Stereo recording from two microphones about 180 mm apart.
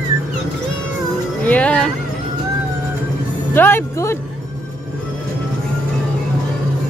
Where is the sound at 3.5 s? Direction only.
15° left (ahead or behind).